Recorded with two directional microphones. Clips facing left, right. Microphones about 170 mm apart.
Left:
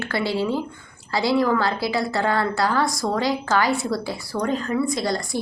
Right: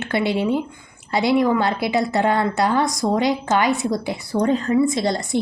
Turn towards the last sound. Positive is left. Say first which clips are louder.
# right 3 dB
turn(degrees=-20)  # may be behind; listen again after turning